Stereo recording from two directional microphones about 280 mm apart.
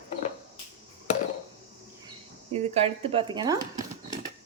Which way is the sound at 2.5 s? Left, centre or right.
Right.